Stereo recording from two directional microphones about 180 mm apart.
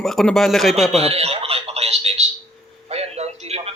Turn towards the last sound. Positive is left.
turn(degrees=-35)  # may be behind; listen again after turning